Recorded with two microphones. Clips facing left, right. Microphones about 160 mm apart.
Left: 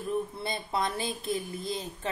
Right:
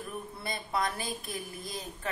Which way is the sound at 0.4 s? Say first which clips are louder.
Left 2 dB; 25° left (ahead or behind).